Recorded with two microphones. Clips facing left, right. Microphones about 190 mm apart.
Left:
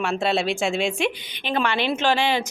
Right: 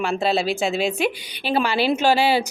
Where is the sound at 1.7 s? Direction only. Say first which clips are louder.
Right 3 dB; 35° right (ahead or behind).